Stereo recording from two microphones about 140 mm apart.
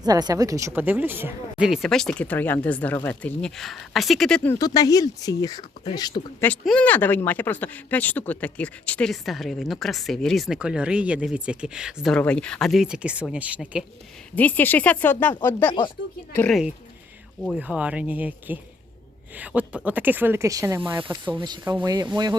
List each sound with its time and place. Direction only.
0.0 s a woman's voice: 30° right (ahead or behind)
1.6 s speech: centre (ahead or behind)
4.5 s speech: 25° left (ahead or behind)
6.4 s speech: 10° left (ahead or behind); by 12.1 s 5° right (ahead or behind)
12.1 s speech: 5° left (ahead or behind); by 13.8 s 10° right (ahead or behind)
14.3 s speech: 10° left (ahead or behind)
17.6 s speech: 10° right (ahead or behind)
21.3 s speech: 30° right (ahead or behind)
21.6 s a woman's voice: 20° right (ahead or behind)